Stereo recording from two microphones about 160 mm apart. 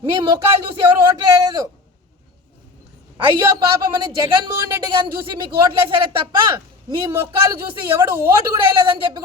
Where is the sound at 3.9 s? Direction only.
25° right (ahead or behind).